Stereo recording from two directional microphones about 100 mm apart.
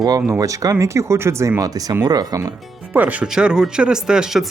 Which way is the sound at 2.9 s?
10° right (ahead or behind).